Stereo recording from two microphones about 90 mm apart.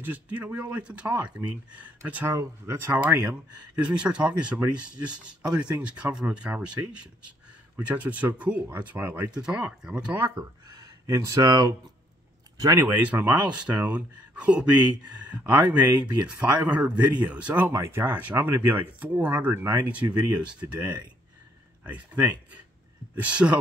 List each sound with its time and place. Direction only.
0.0 s speech: 20° right (ahead or behind)
2.2 s speech: 30° right (ahead or behind)
3.8 s speech: 10° right (ahead or behind)
5.8 s speech: 15° right (ahead or behind)
7.7 s speech: 15° right (ahead or behind)
9.3 s speech: 10° right (ahead or behind)
10.1 s speech: 25° right (ahead or behind)
11.1 s speech: 35° right (ahead or behind)
12.5 s speech: 40° right (ahead or behind)
12.8 s speech: 20° right (ahead or behind)
17.7 s speech: 30° right (ahead or behind)
18.0 s speech: 20° right (ahead or behind)